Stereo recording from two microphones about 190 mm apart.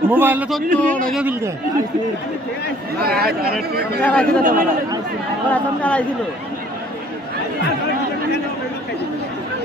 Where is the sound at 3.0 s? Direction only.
55° right (ahead or behind).